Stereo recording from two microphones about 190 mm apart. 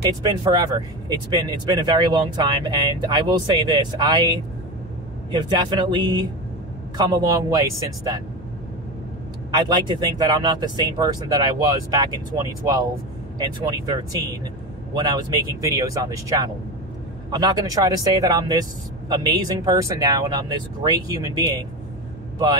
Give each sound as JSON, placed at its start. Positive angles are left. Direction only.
{"t": 0.0, "sound": "speech", "side_deg": -20}
{"t": 9.6, "sound": "speech", "side_deg": -20}